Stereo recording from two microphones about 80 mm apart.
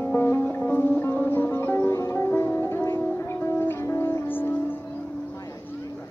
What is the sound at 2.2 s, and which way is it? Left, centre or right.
Music, left.